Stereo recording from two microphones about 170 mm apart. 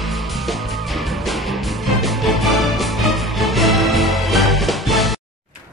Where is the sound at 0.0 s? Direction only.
Centre (ahead or behind).